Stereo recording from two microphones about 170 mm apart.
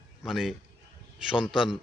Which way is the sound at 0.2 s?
Centre (ahead or behind).